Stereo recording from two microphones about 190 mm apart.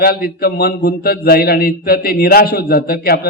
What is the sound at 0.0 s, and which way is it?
A man's voice, 55° left (ahead or behind).